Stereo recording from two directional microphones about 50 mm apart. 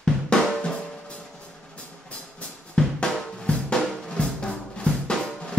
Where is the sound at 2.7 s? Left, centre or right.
Centre.